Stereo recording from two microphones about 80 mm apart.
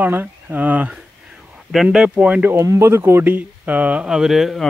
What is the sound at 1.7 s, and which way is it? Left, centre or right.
Speech, centre.